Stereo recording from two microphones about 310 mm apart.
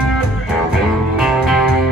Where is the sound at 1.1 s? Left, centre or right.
Centre.